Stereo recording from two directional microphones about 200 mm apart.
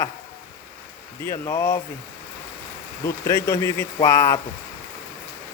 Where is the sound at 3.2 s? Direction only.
15° left (ahead or behind).